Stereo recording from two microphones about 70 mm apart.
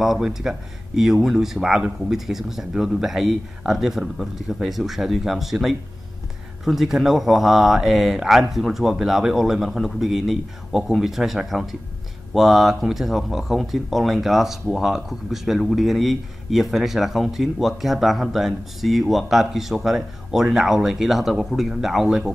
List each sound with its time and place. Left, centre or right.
0.0 s speech: centre